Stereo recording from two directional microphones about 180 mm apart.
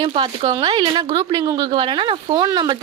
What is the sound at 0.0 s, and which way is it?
Speech, 25° right (ahead or behind).